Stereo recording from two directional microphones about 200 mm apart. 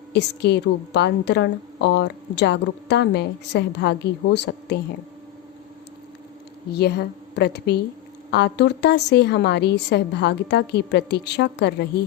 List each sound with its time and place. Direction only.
0.1 s a woman's voice: 60° left (ahead or behind)
6.7 s a woman's voice: 55° left (ahead or behind)